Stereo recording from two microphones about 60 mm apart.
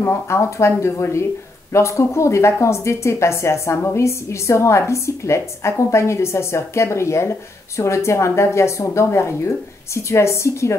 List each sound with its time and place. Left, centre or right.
0.0 s a woman's voice: left